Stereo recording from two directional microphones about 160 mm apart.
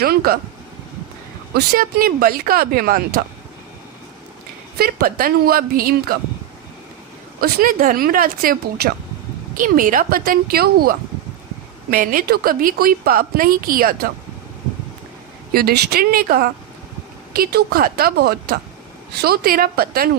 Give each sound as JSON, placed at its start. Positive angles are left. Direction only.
{"t": 0.0, "sound": "speech", "side_deg": -70}
{"t": 1.5, "sound": "speech", "side_deg": -65}
{"t": 4.8, "sound": "a woman's voice", "side_deg": -70}
{"t": 7.4, "sound": "a woman's voice", "side_deg": -60}
{"t": 15.5, "sound": "speech", "side_deg": -80}